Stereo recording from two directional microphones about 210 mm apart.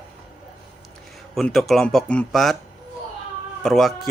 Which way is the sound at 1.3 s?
Centre (ahead or behind).